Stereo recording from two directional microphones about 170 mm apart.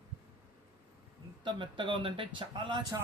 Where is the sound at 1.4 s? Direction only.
30° right (ahead or behind).